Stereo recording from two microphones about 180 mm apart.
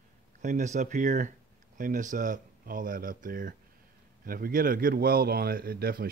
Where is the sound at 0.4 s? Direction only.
45° right (ahead or behind).